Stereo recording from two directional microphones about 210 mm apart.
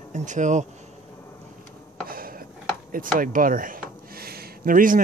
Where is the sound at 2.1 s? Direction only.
45° right (ahead or behind).